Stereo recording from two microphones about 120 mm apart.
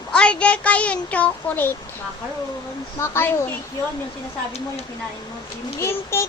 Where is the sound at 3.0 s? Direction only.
20° left (ahead or behind).